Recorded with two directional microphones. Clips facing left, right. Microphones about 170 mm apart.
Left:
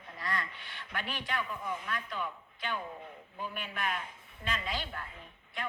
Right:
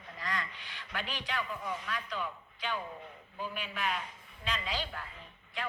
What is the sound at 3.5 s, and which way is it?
A man's voice, 50° left (ahead or behind).